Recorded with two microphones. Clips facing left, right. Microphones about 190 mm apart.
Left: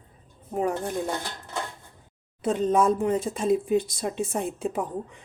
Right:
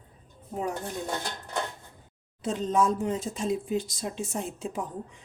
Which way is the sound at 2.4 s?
55° left (ahead or behind).